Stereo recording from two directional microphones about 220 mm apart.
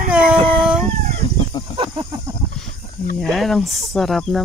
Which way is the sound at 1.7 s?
20° right (ahead or behind).